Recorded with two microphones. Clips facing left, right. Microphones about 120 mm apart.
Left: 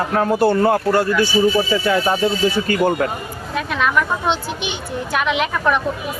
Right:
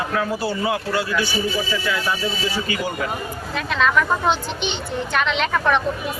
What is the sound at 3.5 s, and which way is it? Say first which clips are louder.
Speech: left 1 dB; 10° left (ahead or behind).